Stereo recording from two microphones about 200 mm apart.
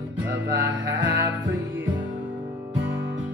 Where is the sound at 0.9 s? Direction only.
70° right (ahead or behind).